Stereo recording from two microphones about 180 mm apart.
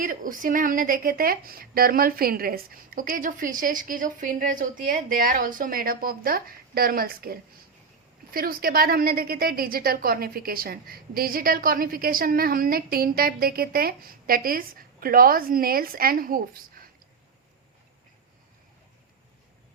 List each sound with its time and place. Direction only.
0.0 s a woman's voice: 50° right (ahead or behind)